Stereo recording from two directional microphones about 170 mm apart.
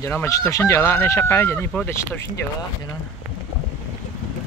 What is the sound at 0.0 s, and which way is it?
Speech, 15° left (ahead or behind).